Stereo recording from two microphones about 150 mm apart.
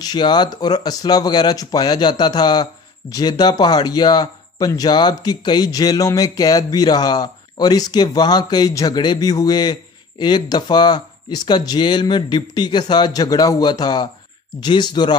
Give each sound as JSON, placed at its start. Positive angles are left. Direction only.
{"t": 0.0, "sound": "speech", "side_deg": 30}